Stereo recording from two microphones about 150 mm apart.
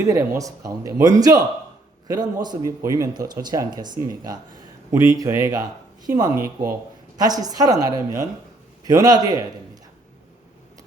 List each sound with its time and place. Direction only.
0.0 s speech: 20° right (ahead or behind)